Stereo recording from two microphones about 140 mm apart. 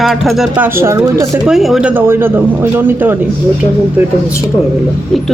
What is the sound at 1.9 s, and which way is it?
Speech, 15° right (ahead or behind).